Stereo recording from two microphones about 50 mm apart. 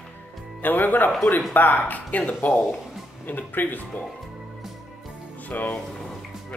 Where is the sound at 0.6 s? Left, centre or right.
Left.